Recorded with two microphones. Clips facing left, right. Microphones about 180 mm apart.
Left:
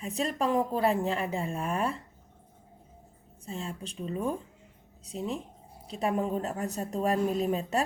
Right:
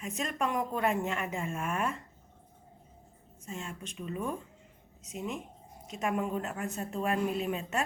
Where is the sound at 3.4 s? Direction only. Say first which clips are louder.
Left 4 dB; 35° left (ahead or behind).